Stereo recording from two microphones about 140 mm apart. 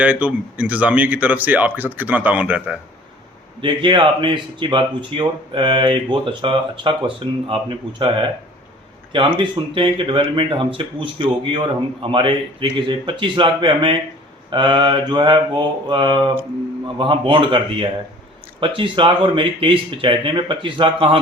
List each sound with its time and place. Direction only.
0.0 s speech: 10° right (ahead or behind)
3.6 s speech: 35° right (ahead or behind)
9.4 s speech: 35° right (ahead or behind)